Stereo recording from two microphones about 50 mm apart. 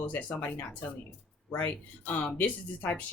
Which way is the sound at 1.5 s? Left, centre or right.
Left.